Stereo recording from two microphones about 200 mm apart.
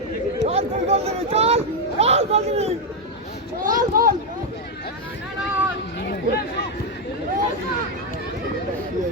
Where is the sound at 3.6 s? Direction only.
45° right (ahead or behind).